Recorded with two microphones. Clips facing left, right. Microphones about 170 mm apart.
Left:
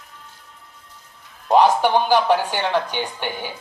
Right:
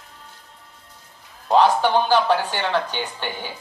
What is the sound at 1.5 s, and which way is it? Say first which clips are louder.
Speech: left 1 dB; 15° left (ahead or behind).